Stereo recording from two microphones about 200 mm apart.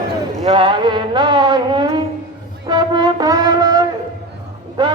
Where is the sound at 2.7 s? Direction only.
20° right (ahead or behind).